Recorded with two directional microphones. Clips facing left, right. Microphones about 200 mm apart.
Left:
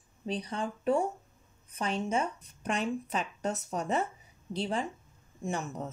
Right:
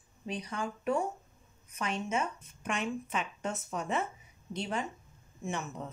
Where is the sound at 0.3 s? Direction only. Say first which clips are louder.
Left 3 dB; 30° left (ahead or behind).